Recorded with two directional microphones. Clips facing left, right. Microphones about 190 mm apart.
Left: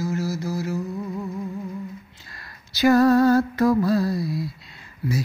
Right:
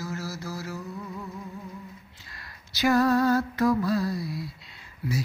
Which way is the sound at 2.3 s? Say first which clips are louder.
Left 2 dB; 40° left (ahead or behind).